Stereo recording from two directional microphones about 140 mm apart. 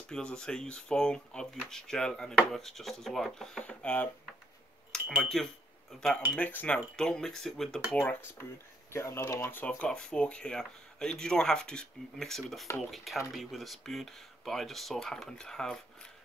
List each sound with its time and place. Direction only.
0.1 s speech: 5° left (ahead or behind)
4.9 s cutlery: 5° right (ahead or behind)
6.3 s speech: 10° left (ahead or behind)
8.0 s speech: 15° left (ahead or behind)
12.6 s speech: 20° left (ahead or behind)
12.9 s speech: centre (ahead or behind)